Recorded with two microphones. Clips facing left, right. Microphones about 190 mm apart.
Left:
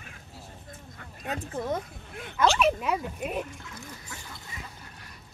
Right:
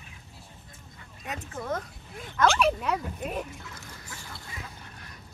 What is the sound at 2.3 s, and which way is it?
Speech, 5° left (ahead or behind).